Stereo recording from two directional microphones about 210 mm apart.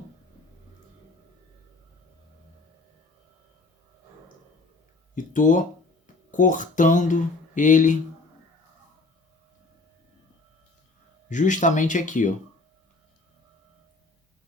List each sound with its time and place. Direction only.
5.1 s speech: 40° left (ahead or behind)
11.3 s speech: 35° left (ahead or behind)